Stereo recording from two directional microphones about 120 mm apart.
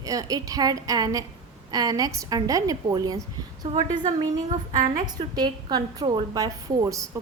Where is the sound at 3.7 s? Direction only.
45° right (ahead or behind); by 7.1 s 30° right (ahead or behind).